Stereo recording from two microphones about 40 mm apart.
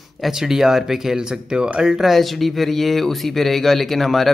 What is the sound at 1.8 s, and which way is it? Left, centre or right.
Speech, centre.